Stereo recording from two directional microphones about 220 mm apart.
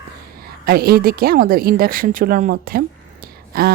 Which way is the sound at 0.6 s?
45° right (ahead or behind).